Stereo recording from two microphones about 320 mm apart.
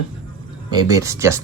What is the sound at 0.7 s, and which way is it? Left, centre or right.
Speech, centre.